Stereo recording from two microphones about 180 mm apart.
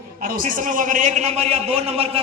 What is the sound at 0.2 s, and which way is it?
A man's voice, 50° right (ahead or behind).